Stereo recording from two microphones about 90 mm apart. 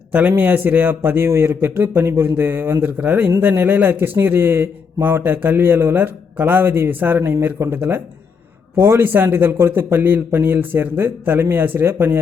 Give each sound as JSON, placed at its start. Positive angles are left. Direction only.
{"t": 0.1, "sound": "a man's voice", "side_deg": -20}